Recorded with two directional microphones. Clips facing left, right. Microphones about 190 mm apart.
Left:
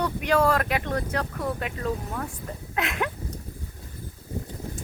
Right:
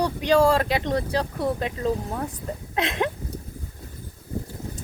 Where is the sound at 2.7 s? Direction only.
30° right (ahead or behind).